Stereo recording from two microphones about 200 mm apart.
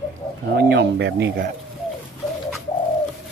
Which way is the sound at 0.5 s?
60° right (ahead or behind).